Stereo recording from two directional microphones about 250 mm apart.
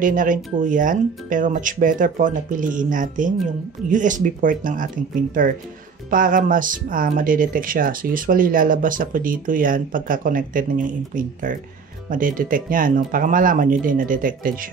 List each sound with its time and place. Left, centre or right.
0.0 s speech: right